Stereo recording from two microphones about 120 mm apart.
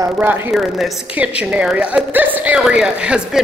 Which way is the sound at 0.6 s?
Centre (ahead or behind).